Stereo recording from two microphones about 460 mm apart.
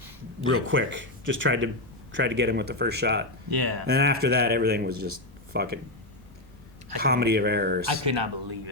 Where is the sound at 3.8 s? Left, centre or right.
Right.